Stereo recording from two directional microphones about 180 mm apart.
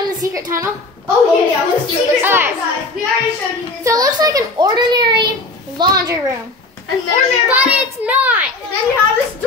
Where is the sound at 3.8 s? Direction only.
20° right (ahead or behind).